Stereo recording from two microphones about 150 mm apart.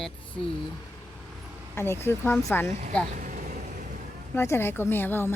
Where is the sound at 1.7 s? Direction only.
15° left (ahead or behind).